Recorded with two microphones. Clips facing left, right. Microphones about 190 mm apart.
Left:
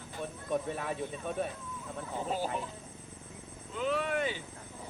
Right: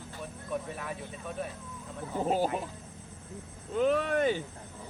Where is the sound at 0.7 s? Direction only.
25° left (ahead or behind).